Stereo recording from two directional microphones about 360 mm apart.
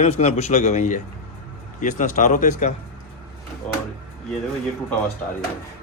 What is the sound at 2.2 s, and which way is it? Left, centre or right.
Speech, left.